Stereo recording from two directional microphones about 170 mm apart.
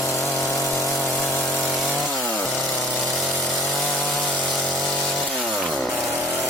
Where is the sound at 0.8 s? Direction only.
Centre (ahead or behind).